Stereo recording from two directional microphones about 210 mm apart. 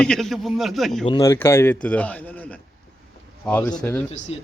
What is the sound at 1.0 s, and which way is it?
A man's voice, 20° left (ahead or behind).